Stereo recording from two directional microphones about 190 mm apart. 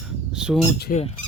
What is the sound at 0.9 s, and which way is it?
Speech, 45° left (ahead or behind).